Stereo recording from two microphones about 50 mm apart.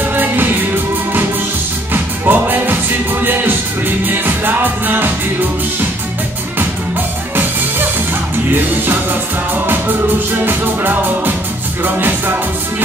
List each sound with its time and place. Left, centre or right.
0.1 s music: right
2.2 s music: right
10.4 s music: right